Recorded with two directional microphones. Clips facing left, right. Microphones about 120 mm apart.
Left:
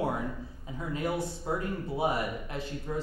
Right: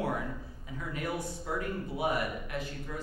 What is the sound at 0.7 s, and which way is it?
A man's voice, 25° left (ahead or behind).